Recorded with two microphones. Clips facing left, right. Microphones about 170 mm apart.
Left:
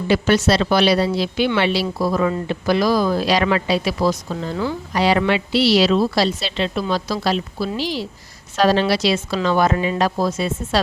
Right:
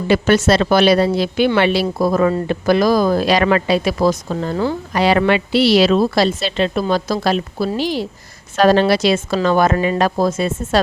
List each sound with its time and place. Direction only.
0.1 s speech: 50° right (ahead or behind)